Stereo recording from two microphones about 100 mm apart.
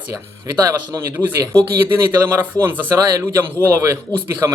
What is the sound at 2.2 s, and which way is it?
Speech, 25° right (ahead or behind).